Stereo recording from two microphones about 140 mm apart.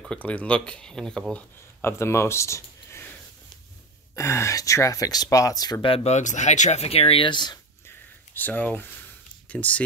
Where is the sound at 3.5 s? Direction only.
30° left (ahead or behind).